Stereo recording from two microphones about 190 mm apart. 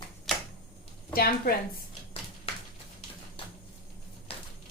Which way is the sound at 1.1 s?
50° left (ahead or behind).